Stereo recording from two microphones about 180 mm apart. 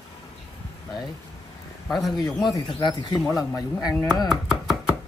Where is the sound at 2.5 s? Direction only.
25° left (ahead or behind).